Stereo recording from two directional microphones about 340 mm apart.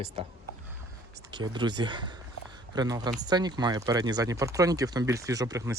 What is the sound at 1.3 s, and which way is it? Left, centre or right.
Speech, centre.